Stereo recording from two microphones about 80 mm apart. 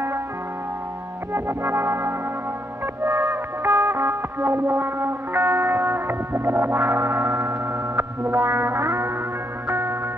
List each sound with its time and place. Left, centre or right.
1.3 s music: right